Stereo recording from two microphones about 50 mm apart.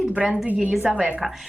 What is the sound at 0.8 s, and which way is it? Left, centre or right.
Speech, right.